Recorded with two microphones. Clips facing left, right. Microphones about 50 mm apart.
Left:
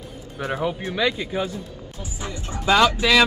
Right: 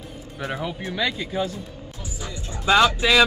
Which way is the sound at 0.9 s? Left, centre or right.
Centre.